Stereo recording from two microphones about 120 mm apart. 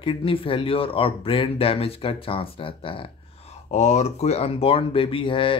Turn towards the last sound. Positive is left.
turn(degrees=45)  # may be behind; listen again after turning